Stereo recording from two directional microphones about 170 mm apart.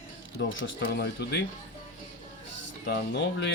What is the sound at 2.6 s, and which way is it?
Speech, 80° left.